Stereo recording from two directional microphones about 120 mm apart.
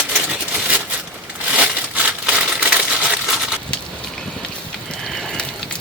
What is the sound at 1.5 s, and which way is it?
Crumpling, 10° right (ahead or behind).